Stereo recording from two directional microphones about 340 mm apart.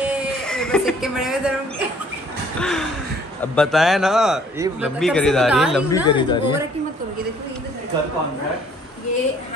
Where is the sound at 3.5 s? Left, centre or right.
Centre.